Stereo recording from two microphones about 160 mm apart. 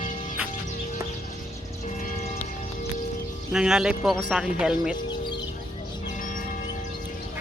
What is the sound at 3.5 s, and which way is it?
Speech, 5° right (ahead or behind).